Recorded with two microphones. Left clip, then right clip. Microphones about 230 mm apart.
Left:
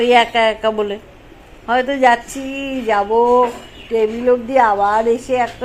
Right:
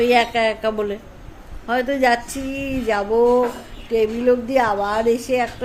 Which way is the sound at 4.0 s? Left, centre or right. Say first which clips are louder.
Left 3 dB; centre.